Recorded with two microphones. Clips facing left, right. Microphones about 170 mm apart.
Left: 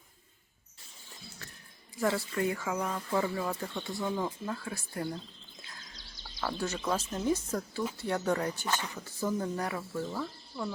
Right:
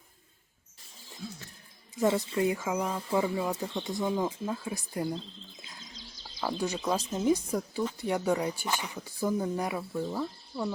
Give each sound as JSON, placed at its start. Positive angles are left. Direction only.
{"t": 1.2, "sound": "music", "side_deg": -90}
{"t": 2.0, "sound": "speech", "side_deg": -20}
{"t": 2.8, "sound": "speech", "side_deg": -5}
{"t": 3.2, "sound": "speech", "side_deg": -15}
{"t": 6.6, "sound": "speech", "side_deg": -15}